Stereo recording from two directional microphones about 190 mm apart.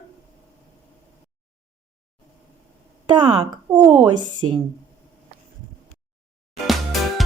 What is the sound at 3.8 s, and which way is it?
Speech, 10° right (ahead or behind).